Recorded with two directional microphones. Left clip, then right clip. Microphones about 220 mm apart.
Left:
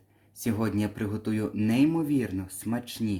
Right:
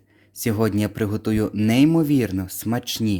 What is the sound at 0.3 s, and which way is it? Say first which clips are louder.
Speech: right 8 dB; 40° right (ahead or behind).